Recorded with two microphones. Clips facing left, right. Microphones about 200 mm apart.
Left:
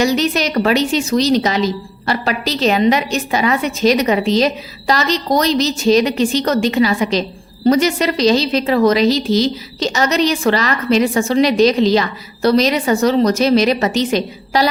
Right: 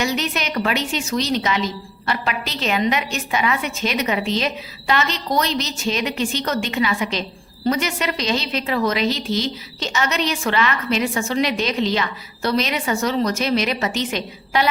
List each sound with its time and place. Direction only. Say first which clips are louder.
0.0 s a woman's voice: left 7 dB; 35° left (ahead or behind)